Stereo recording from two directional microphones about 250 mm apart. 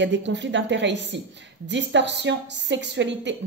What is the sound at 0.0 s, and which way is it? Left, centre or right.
A woman's voice, right.